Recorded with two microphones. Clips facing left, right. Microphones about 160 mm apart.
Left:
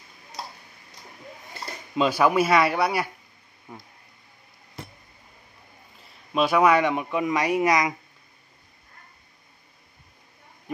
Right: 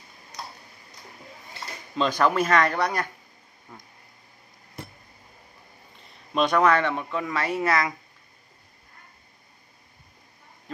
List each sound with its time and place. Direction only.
2.0 s speech: 10° left (ahead or behind)
5.9 s a man's voice: 5° left (ahead or behind)